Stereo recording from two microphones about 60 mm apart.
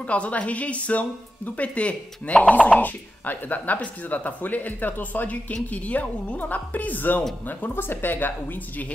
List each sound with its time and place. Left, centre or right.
0.0 s a woman's voice: left